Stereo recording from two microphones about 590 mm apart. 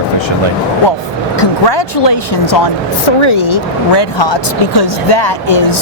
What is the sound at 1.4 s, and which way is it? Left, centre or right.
Speech, left.